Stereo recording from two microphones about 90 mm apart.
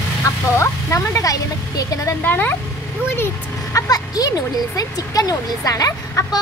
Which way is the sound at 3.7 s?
40° left (ahead or behind).